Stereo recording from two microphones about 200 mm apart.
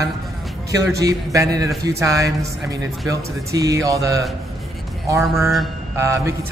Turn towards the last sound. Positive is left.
turn(degrees=-15)  # may be behind; listen again after turning